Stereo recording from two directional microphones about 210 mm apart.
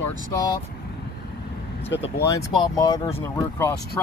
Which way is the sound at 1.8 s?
55° left (ahead or behind).